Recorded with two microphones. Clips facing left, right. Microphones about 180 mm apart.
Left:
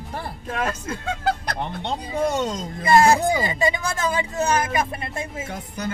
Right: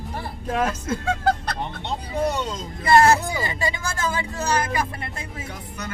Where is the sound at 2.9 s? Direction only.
15° left (ahead or behind).